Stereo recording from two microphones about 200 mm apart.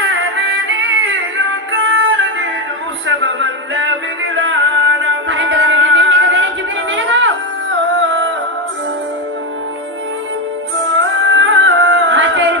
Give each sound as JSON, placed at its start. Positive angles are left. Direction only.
{"t": 0.1, "sound": "music", "side_deg": -60}
{"t": 11.2, "sound": "music", "side_deg": -65}